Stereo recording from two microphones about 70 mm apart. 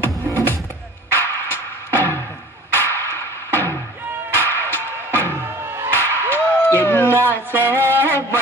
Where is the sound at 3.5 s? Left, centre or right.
Left.